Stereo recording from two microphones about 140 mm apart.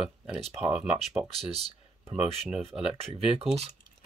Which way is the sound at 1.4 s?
45° right (ahead or behind).